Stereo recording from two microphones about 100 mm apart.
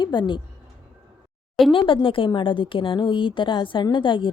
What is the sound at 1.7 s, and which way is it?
A woman's voice, 60° left (ahead or behind).